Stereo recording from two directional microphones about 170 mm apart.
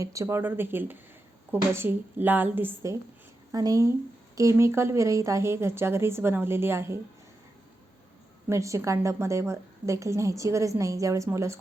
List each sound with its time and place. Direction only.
0.0 s a woman's voice: 20° right (ahead or behind)
8.4 s a woman's voice: 15° right (ahead or behind)